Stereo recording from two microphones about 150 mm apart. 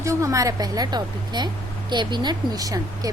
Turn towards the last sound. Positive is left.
turn(degrees=-25)  # may be behind; listen again after turning